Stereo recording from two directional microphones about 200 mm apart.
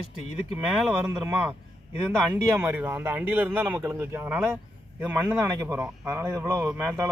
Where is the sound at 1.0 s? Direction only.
15° right (ahead or behind).